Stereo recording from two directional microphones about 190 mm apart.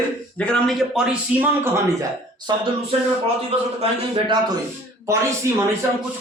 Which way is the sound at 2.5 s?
20° right (ahead or behind).